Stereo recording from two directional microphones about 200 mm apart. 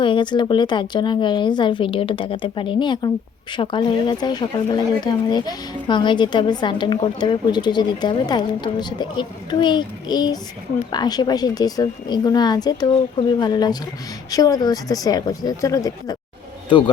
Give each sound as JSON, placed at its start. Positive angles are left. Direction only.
{"t": 0.0, "sound": "a man's voice", "side_deg": 25}